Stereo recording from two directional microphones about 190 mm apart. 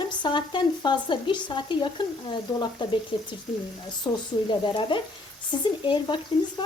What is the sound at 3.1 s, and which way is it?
Speech, 25° left (ahead or behind).